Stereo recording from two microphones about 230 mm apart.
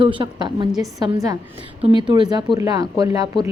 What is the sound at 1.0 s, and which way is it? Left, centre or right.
Speech, centre.